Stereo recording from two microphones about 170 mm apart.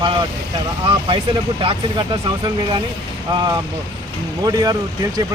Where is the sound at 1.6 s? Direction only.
30° right (ahead or behind).